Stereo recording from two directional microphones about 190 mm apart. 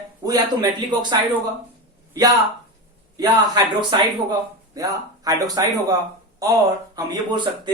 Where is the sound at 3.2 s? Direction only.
20° right (ahead or behind).